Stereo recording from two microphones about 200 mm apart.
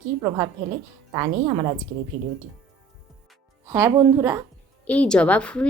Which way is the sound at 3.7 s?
15° right (ahead or behind).